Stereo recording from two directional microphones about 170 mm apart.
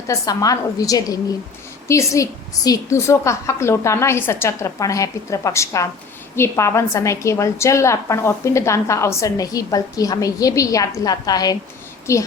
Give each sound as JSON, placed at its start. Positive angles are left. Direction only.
{"t": 0.1, "sound": "a woman's voice", "side_deg": 20}